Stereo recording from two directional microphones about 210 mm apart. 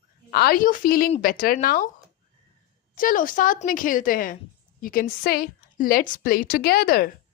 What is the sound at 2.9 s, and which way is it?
A woman's voice, 40° left (ahead or behind).